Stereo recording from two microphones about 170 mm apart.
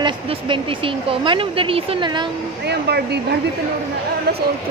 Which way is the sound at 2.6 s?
75° right (ahead or behind).